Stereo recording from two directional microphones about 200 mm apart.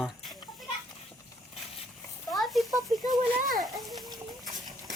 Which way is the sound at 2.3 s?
Centre (ahead or behind).